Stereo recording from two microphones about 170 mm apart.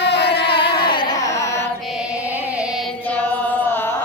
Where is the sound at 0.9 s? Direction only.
25° left (ahead or behind).